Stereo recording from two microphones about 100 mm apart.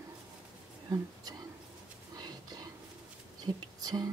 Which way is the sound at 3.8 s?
40° right (ahead or behind).